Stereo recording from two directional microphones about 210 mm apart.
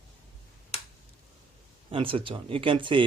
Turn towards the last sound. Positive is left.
turn(degrees=-25)  # may be behind; listen again after turning